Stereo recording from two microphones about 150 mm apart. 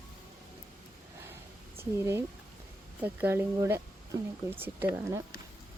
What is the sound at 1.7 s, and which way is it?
Speech, 15° right (ahead or behind).